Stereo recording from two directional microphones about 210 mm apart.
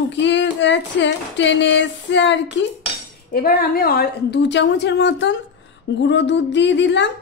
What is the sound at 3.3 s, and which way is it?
A woman's voice, 45° left (ahead or behind).